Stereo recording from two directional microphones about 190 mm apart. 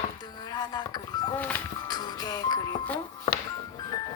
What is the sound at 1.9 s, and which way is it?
Speech, 20° left (ahead or behind).